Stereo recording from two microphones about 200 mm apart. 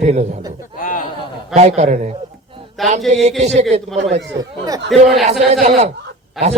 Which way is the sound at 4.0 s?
60° right (ahead or behind).